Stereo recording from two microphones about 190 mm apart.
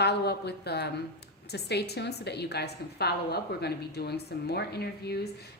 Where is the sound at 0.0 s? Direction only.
60° left (ahead or behind).